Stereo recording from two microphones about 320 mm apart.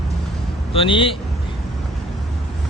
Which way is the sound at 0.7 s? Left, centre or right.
Centre.